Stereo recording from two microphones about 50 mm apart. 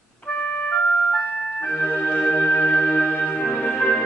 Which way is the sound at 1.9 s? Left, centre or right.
Left.